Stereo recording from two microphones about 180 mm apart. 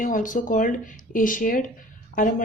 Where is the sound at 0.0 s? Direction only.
45° left (ahead or behind).